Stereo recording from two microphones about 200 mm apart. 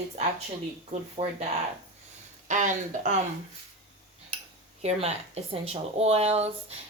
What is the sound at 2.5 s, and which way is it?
Speech, 40° right (ahead or behind).